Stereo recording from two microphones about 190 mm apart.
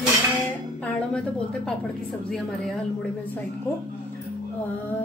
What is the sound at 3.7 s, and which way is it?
Speech, 15° left (ahead or behind).